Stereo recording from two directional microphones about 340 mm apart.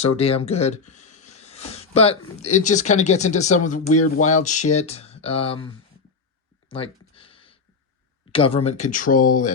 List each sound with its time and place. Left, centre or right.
0.0 s speech: centre
6.7 s a sound: centre
8.3 s speech: centre